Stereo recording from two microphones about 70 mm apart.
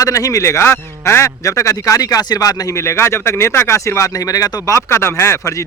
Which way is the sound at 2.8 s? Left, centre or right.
Left.